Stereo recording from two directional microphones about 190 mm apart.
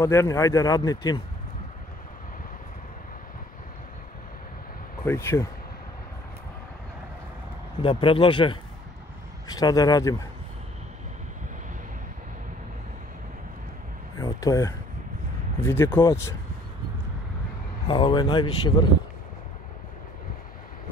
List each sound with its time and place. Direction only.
0.0 s speech: 15° left (ahead or behind)
5.0 s speech: 15° left (ahead or behind)
7.8 s speech: 30° left (ahead or behind)
14.1 s a sound: 20° left (ahead or behind)
15.6 s speech: 10° left (ahead or behind)
17.8 s speech: 25° left (ahead or behind)